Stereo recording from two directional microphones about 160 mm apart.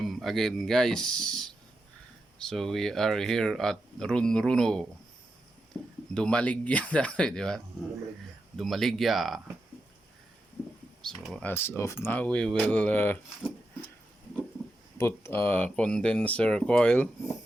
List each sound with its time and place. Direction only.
0.0 s speech: centre (ahead or behind)
6.1 s speech: 5° left (ahead or behind)
11.0 s speech: 5° left (ahead or behind)
11.5 s speech: 15° left (ahead or behind)
14.9 s speech: 15° left (ahead or behind)